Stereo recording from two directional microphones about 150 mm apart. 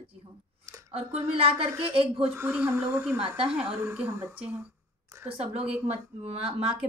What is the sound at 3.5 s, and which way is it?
Speech, 5° right (ahead or behind).